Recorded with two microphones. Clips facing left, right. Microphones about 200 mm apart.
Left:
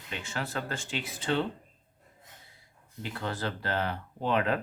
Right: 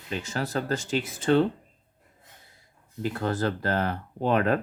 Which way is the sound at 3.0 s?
45° right (ahead or behind).